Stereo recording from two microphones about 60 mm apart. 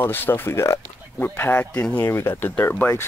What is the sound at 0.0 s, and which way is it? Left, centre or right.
Speech, left.